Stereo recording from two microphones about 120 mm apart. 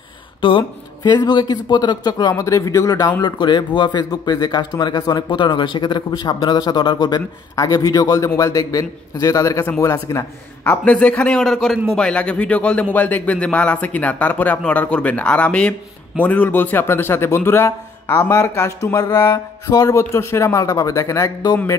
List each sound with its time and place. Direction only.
0.4 s speech: 45° left (ahead or behind)
7.2 s a man's voice: 25° left (ahead or behind)